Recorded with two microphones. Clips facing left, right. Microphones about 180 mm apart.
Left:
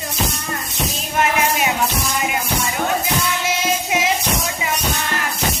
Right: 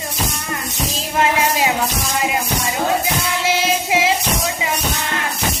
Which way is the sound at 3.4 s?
30° right (ahead or behind).